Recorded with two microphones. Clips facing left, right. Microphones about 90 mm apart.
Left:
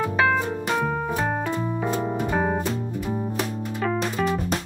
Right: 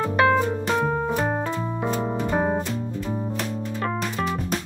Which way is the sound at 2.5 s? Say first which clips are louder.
Even; 10° left (ahead or behind).